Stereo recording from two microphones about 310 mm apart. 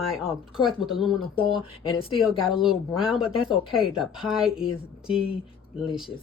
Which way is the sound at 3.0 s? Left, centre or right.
Centre.